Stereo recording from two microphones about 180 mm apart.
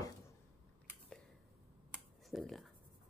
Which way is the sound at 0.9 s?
5° left (ahead or behind).